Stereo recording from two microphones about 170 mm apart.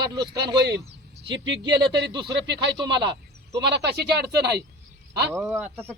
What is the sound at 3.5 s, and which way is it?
Speech, 85° right.